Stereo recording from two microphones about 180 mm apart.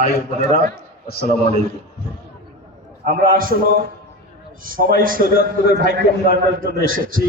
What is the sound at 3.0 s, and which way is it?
A man's voice, 50° right (ahead or behind).